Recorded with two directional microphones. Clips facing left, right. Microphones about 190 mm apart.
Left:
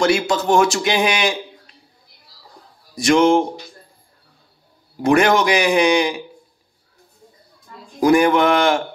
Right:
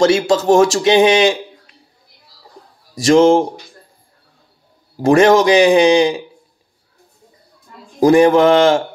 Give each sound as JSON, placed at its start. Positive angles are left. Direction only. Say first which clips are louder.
{"t": 0.0, "sound": "speech", "louder": "right 5 dB", "side_deg": -35}
{"t": 3.1, "sound": "speech", "louder": "right 4 dB", "side_deg": -35}
{"t": 5.0, "sound": "speech", "louder": "right 5 dB", "side_deg": -35}
{"t": 8.0, "sound": "speech", "louder": "right 5 dB", "side_deg": -30}